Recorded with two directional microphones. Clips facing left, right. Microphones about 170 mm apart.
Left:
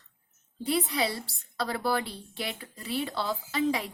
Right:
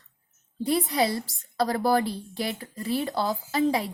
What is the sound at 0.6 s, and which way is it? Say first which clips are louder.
A woman's voice: right 4 dB; 40° right (ahead or behind).